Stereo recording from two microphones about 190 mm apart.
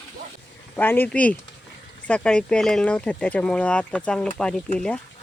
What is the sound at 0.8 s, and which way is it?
Speech, 10° left (ahead or behind).